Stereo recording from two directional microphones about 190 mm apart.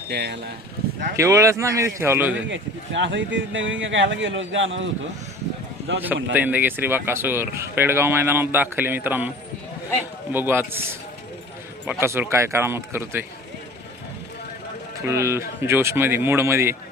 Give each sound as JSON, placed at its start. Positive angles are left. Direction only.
{"t": 0.1, "sound": "speech", "side_deg": -60}
{"t": 1.1, "sound": "speech", "side_deg": -15}
{"t": 2.5, "sound": "speech", "side_deg": -75}
{"t": 6.3, "sound": "speech", "side_deg": -10}
{"t": 10.3, "sound": "speech", "side_deg": -10}
{"t": 15.0, "sound": "speech", "side_deg": -15}